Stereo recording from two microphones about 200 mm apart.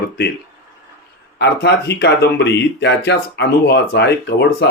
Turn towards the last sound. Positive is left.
turn(degrees=55)  # may be behind; listen again after turning